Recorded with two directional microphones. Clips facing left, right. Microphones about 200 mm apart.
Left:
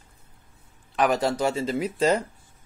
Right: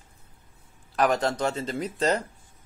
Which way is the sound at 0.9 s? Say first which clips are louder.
Left 1 dB; 5° left (ahead or behind).